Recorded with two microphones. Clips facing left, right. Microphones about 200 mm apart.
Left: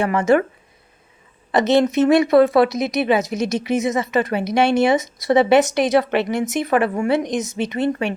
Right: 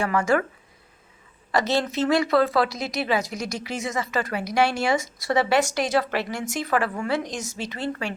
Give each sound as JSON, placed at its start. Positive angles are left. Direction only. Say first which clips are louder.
{"t": 0.0, "sound": "speech", "louder": "left 6 dB", "side_deg": 20}
{"t": 1.5, "sound": "speech", "louder": "left 8 dB", "side_deg": 20}